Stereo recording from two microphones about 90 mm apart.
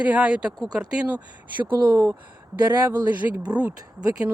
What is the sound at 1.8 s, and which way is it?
Speech, 40° right (ahead or behind).